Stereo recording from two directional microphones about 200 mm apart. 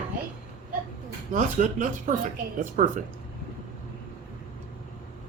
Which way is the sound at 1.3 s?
40° right (ahead or behind).